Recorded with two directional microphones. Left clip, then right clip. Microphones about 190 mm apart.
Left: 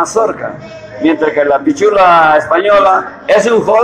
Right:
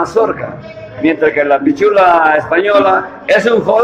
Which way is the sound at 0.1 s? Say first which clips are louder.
Even; 15° right (ahead or behind).